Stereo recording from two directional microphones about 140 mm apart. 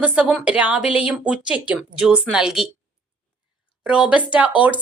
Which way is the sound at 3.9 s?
10° right (ahead or behind).